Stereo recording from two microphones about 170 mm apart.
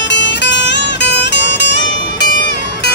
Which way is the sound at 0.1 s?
90° left.